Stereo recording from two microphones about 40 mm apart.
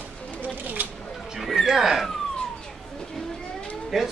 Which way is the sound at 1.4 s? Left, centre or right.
Centre.